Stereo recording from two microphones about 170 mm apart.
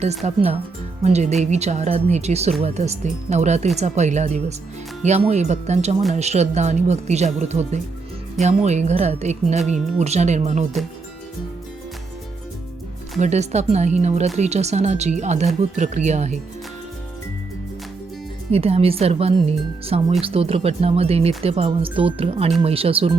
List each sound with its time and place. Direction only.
0.2 s speech: 40° right (ahead or behind)
13.1 s speech: 40° right (ahead or behind)
18.5 s speech: 35° right (ahead or behind)